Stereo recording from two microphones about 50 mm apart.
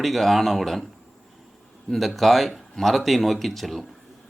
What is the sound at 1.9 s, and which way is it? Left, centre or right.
Speech, centre.